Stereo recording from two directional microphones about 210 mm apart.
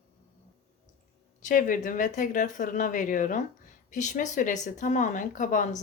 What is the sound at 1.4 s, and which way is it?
Speech, 40° left (ahead or behind).